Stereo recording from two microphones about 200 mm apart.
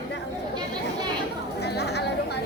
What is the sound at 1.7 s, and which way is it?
Chatter, 55° left (ahead or behind).